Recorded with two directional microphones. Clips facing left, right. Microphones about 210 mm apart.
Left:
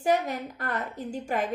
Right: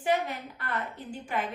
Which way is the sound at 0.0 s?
45° left (ahead or behind).